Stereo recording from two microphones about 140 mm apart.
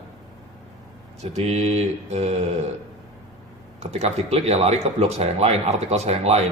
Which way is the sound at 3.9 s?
50° right (ahead or behind).